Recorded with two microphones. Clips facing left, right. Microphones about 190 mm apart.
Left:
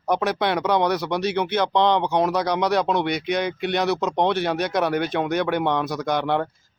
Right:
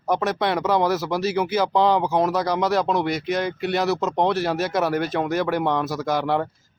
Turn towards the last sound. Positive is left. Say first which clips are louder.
# even
turn(degrees=0)  # may be behind; listen again after turning